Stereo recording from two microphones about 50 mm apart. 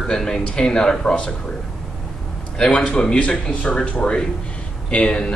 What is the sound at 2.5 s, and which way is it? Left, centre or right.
A man's voice, centre.